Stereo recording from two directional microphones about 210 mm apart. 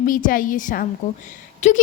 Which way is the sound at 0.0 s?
40° left (ahead or behind).